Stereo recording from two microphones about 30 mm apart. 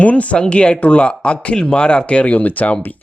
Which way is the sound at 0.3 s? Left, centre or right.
Left.